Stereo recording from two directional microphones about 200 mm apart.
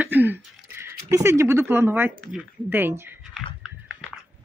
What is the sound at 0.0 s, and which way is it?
Speech, 10° right (ahead or behind).